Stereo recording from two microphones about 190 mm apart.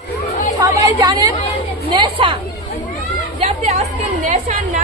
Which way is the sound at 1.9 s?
25° right (ahead or behind).